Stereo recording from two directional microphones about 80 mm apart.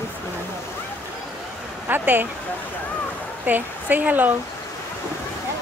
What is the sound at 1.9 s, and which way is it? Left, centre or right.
Speech, right.